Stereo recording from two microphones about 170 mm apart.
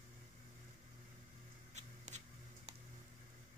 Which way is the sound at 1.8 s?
45° right (ahead or behind).